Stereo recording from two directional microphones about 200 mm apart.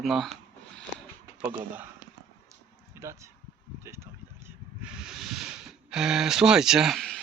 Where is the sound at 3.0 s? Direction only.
15° right (ahead or behind).